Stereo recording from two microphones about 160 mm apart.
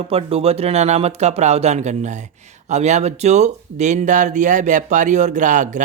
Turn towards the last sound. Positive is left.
turn(degrees=-50)  # may be behind; listen again after turning